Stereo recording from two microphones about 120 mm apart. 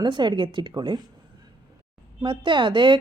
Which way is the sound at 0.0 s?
40° right (ahead or behind).